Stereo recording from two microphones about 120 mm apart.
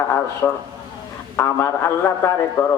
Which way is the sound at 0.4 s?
20° left (ahead or behind).